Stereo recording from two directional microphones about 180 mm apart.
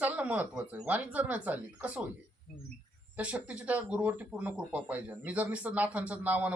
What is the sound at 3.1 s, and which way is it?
Speech, 5° right (ahead or behind).